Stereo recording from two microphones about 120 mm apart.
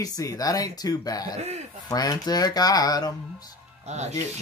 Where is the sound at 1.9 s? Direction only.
35° left (ahead or behind).